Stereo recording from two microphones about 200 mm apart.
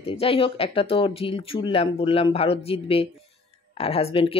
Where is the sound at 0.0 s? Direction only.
30° left (ahead or behind).